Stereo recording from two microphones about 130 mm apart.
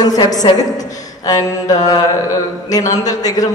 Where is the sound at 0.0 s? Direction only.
30° left (ahead or behind).